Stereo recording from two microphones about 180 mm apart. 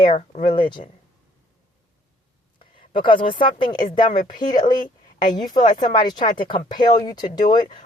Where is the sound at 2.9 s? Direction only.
25° left (ahead or behind).